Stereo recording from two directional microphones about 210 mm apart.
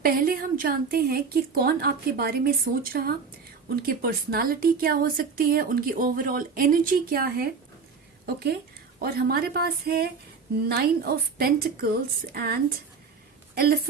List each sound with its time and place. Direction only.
0.0 s a woman's voice: 45° right (ahead or behind)
9.0 s a woman's voice: 45° right (ahead or behind)